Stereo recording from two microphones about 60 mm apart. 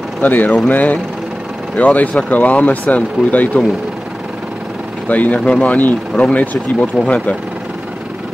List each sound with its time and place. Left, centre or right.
0.2 s speech: left
5.0 s speech: left